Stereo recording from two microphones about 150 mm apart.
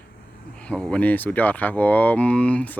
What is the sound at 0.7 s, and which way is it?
Speech, 5° left (ahead or behind).